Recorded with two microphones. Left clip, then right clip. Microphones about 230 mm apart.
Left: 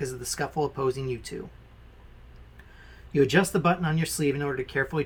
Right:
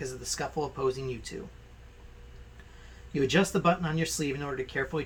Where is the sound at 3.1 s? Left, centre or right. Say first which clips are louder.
Left 4 dB; left.